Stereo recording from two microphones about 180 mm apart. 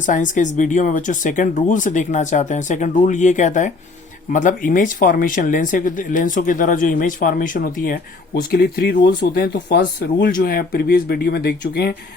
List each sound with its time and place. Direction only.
0.0 s speech: 45° left (ahead or behind); by 11.9 s 65° left (ahead or behind)